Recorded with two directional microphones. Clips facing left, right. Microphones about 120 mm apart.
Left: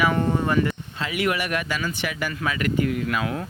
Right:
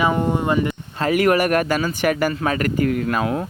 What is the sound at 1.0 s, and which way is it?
Speech, 45° right (ahead or behind).